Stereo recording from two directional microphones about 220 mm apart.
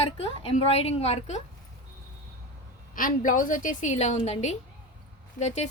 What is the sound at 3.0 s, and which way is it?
A woman's voice, 40° left (ahead or behind).